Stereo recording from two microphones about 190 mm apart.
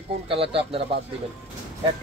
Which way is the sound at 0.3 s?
30° right (ahead or behind).